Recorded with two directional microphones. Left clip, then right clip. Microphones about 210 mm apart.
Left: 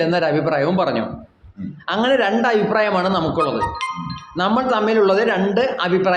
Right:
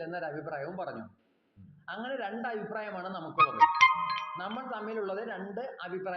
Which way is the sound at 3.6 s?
45° right (ahead or behind).